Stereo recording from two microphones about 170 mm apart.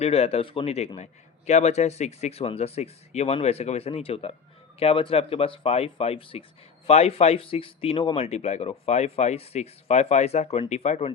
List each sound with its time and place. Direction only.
0.0 s a man's voice: 35° left (ahead or behind)